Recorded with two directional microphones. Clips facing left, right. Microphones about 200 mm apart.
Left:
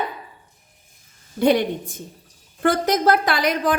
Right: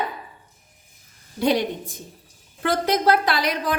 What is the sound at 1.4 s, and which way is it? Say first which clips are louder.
Speech: left 3 dB; 55° left (ahead or behind).